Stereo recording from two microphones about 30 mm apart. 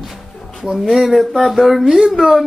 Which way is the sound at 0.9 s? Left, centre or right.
Centre.